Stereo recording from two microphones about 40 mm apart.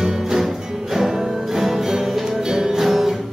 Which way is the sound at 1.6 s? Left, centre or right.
Centre.